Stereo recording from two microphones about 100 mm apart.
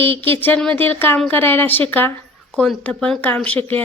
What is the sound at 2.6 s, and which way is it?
Speech, 10° left (ahead or behind).